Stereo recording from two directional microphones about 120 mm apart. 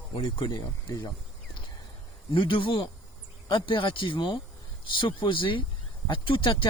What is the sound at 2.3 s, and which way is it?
Speech, 45° left (ahead or behind).